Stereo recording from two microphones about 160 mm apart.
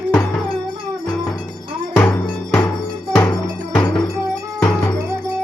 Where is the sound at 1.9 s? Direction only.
10° left (ahead or behind).